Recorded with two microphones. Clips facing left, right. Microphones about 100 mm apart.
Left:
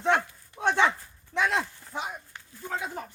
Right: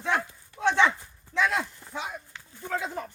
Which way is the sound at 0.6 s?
10° left (ahead or behind).